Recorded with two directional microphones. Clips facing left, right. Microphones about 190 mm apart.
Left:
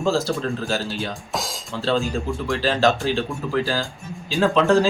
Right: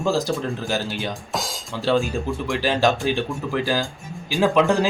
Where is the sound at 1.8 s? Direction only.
15° right (ahead or behind).